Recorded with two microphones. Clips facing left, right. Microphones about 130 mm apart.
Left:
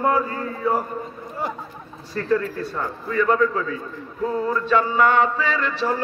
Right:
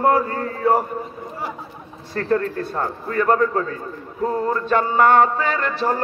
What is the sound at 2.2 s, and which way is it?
Music, 50° right (ahead or behind).